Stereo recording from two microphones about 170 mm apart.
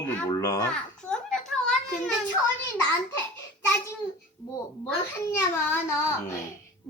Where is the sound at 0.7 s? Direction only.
5° left (ahead or behind).